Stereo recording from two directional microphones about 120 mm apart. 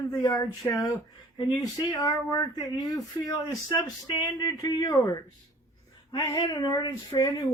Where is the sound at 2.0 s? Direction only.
30° left (ahead or behind).